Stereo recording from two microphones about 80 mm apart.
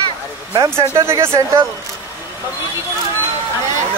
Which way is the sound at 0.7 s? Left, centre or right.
Right.